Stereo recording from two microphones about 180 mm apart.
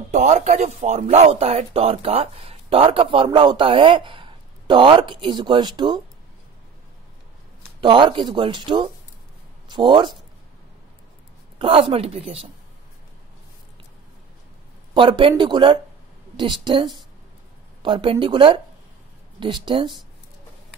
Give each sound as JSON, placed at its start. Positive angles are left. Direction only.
{"t": 0.1, "sound": "a man's voice", "side_deg": -40}
{"t": 7.8, "sound": "a man's voice", "side_deg": -25}
{"t": 11.5, "sound": "a woman's voice", "side_deg": -30}
{"t": 15.0, "sound": "a man's voice", "side_deg": -30}